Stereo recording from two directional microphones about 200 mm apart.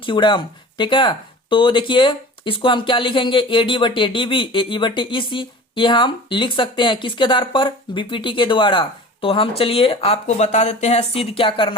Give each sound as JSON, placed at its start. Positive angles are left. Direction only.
{"t": 0.0, "sound": "speech", "side_deg": 25}